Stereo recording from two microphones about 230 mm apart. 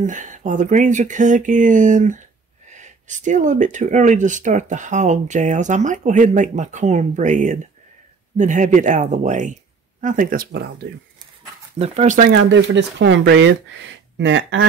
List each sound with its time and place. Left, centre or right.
0.0 s speech: right
11.8 s speech: right
12.4 s speech: right